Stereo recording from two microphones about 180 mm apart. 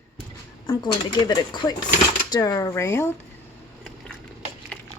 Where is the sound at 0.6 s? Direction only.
25° left (ahead or behind).